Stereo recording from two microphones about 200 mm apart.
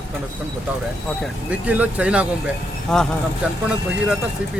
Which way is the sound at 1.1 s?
5° right (ahead or behind).